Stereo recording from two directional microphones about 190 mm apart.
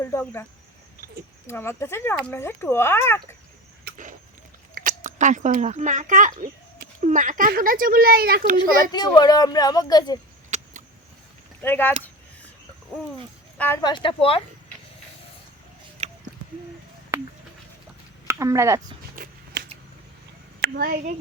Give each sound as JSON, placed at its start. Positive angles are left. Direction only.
{"t": 0.0, "sound": "speech", "side_deg": 15}
{"t": 1.5, "sound": "speech", "side_deg": 15}
{"t": 4.7, "sound": "a child's voice", "side_deg": -45}
{"t": 8.5, "sound": "speech", "side_deg": 20}
{"t": 11.6, "sound": "speech", "side_deg": 10}
{"t": 13.8, "sound": "speech", "side_deg": 25}
{"t": 17.1, "sound": "a sound", "side_deg": -10}
{"t": 18.3, "sound": "speech", "side_deg": -15}
{"t": 19.1, "sound": "shuffling cards", "side_deg": -50}
{"t": 20.6, "sound": "a child's voice", "side_deg": -50}